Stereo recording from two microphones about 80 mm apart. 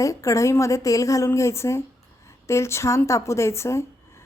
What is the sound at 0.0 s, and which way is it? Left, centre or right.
Speech, left.